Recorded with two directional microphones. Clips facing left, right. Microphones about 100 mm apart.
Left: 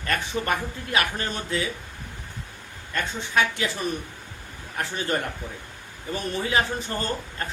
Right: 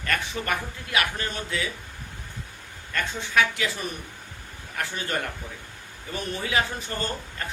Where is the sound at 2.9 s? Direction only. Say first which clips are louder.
Left 1 dB; 25° left (ahead or behind).